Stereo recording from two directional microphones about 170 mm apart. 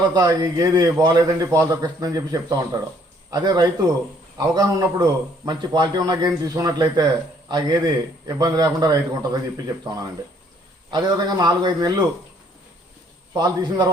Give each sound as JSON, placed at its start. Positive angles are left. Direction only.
{"t": 0.0, "sound": "a man's voice", "side_deg": -25}
{"t": 13.3, "sound": "a man's voice", "side_deg": -25}